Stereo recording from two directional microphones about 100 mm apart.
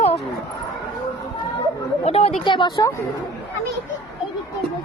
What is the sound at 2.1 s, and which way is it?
Speech, 90° left.